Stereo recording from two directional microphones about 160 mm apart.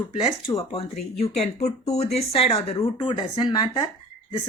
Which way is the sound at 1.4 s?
45° left (ahead or behind).